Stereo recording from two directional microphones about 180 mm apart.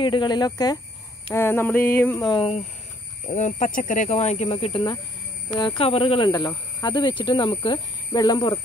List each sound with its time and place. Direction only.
0.0 s speech: 25° left (ahead or behind)
1.3 s a sound: 10° left (ahead or behind)
2.2 s speech: 30° left (ahead or behind)
3.3 s speech: 40° left (ahead or behind); by 8.5 s 25° left (ahead or behind)